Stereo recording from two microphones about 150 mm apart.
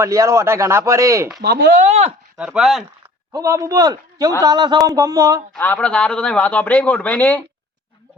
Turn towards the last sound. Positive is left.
turn(degrees=10)  # may be behind; listen again after turning